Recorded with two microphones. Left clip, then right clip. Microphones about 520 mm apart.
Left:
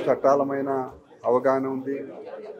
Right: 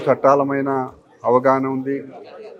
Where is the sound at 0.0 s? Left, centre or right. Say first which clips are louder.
Right 5 dB; right.